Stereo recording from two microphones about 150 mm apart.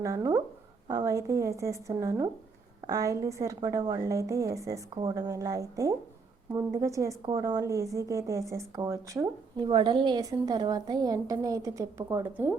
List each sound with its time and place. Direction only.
0.0 s a woman's voice: 20° right (ahead or behind)